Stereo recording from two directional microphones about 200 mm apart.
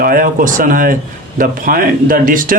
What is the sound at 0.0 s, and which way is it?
A man's voice, 45° right (ahead or behind).